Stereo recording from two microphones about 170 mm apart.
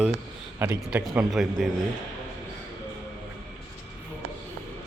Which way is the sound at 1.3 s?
Centre (ahead or behind).